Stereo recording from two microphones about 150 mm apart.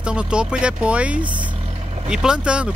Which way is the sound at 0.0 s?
5° right (ahead or behind).